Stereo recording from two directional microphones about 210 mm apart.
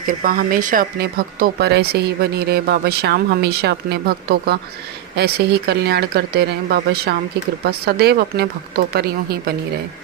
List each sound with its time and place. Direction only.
0.2 s speech: 40° right (ahead or behind)